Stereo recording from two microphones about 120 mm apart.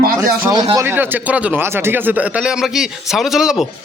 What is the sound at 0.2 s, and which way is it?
Speech, 30° right (ahead or behind).